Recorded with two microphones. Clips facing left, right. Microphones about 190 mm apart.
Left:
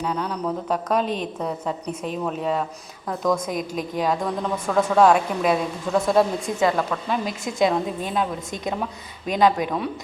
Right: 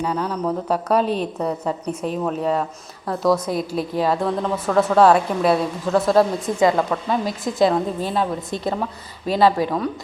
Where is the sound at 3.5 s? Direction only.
35° right (ahead or behind).